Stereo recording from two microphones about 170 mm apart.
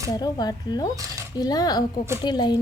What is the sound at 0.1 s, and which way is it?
A woman's voice, 25° left (ahead or behind).